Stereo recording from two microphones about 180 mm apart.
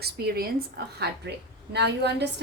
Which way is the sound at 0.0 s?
60° right (ahead or behind).